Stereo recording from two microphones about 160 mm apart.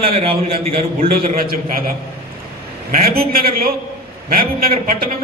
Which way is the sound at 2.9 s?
70° right (ahead or behind).